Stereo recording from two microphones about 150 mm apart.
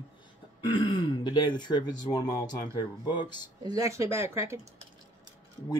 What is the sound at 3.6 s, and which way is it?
Speech, 25° right (ahead or behind).